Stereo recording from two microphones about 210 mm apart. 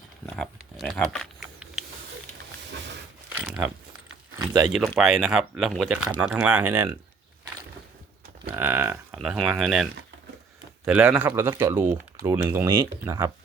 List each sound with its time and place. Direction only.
0.3 s a sound: centre (ahead or behind)
3.3 s a sound: 5° right (ahead or behind)
4.4 s speech: 15° right (ahead or behind)
4.7 s speech: centre (ahead or behind)
8.5 s speech: 10° right (ahead or behind)
10.8 s speech: 5° right (ahead or behind)